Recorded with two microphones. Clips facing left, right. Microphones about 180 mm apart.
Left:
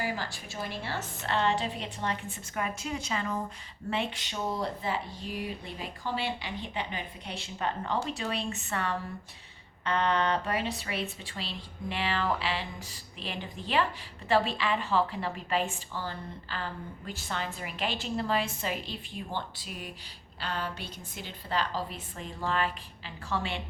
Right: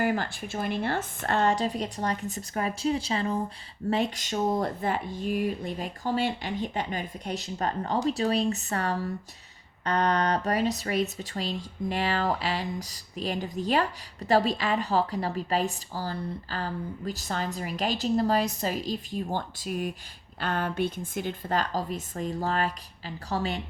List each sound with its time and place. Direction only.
0.0 s speech: 55° right (ahead or behind)